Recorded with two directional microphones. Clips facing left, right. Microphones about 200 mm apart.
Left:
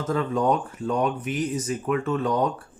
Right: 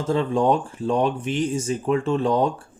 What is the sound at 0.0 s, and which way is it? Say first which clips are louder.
Speech: right 3 dB; 30° right (ahead or behind).